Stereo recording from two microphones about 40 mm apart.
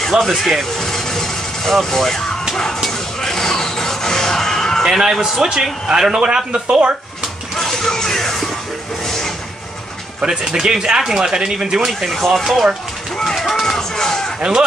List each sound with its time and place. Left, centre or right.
0.1 s speech: right
0.5 s vehicle: centre
2.5 s music: centre
4.8 s a man's voice: centre; by 7.0 s right
7.5 s music: centre
10.4 s a man's voice: centre
12.1 s speech: centre
13.4 s music: centre